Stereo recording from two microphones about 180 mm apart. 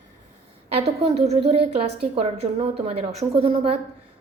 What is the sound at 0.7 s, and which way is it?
A woman's voice, 35° right (ahead or behind).